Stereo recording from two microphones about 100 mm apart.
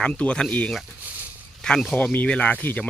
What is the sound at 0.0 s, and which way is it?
Speech, 10° left (ahead or behind).